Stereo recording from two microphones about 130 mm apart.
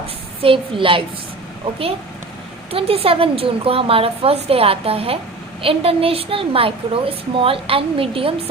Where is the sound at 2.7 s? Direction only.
45° right (ahead or behind).